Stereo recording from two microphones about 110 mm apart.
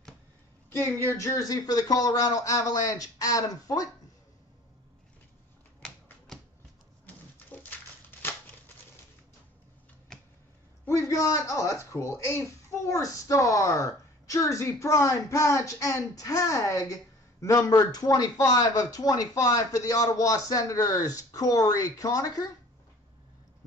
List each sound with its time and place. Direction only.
0.7 s a man's voice: 25° left (ahead or behind)
6.3 s a sound: 5° left (ahead or behind)
7.1 s typewriter: 15° left (ahead or behind)
10.9 s a man's voice: 30° left (ahead or behind)